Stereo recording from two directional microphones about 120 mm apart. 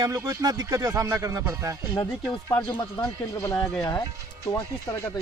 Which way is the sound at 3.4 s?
20° left (ahead or behind).